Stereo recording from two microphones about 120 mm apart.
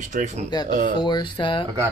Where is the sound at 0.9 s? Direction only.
40° left (ahead or behind).